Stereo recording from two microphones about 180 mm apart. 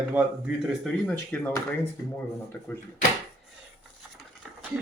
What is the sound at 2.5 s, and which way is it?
Speech, 10° left (ahead or behind).